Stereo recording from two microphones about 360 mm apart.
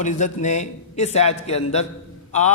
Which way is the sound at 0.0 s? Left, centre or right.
Centre.